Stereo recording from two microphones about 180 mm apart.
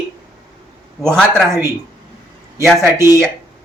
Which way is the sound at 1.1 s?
Centre (ahead or behind).